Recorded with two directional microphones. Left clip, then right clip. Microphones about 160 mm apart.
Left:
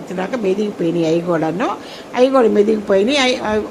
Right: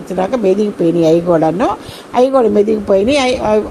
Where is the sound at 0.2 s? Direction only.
20° right (ahead or behind).